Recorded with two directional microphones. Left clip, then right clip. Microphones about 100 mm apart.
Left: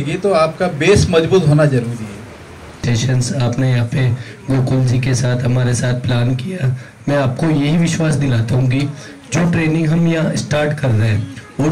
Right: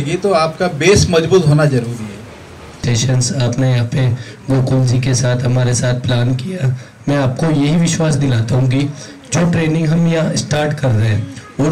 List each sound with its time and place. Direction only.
0.0 s speech: 25° right (ahead or behind)